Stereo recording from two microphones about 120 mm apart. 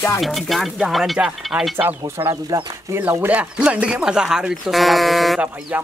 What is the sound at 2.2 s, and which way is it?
Speech, 25° right (ahead or behind).